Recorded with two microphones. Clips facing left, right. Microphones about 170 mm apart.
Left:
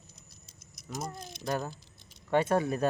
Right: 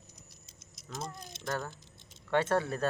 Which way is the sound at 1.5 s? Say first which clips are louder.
Left 3 dB; 20° left (ahead or behind).